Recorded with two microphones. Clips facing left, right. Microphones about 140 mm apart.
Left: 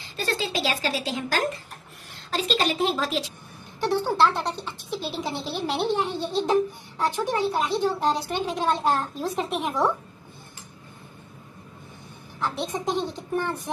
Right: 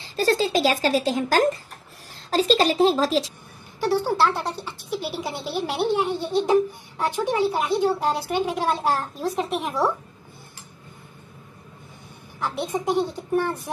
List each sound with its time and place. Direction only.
0.0 s a woman's voice: 35° right (ahead or behind)
3.8 s a woman's voice: 10° right (ahead or behind)
12.4 s a woman's voice: 15° right (ahead or behind)